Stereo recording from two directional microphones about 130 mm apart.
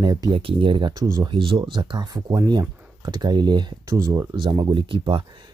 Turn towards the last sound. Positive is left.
turn(degrees=-40)  # may be behind; listen again after turning